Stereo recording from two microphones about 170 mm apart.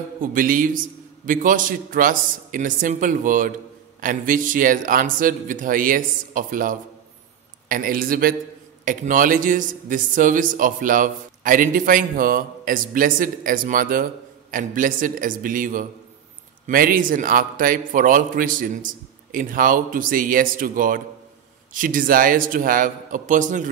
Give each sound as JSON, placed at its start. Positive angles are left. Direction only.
{"t": 0.2, "sound": "a man's voice", "side_deg": -55}